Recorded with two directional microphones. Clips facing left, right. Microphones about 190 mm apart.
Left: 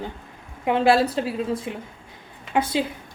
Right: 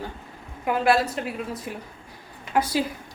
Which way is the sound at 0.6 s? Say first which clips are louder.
Left 3 dB; 25° left (ahead or behind).